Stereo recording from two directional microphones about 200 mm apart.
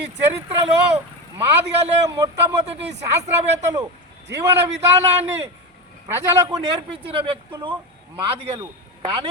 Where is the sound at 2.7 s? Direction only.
60° right (ahead or behind).